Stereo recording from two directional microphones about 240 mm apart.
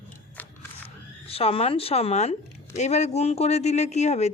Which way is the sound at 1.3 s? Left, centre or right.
Left.